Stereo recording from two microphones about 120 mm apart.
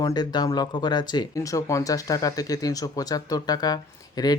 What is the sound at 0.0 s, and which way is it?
Speech, 35° left (ahead or behind).